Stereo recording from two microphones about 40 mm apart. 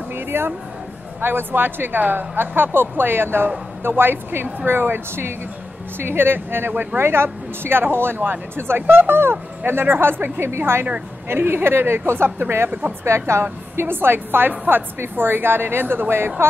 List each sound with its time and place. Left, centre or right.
0.1 s a sound: right
1.2 s a woman's voice: right
5.9 s a woman's voice: right
10.4 s a woman's voice: right
11.2 s a woman's voice: right
12.6 s speech: right
13.1 s a woman's voice: right